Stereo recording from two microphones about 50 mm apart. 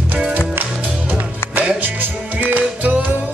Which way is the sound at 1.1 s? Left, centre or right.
Right.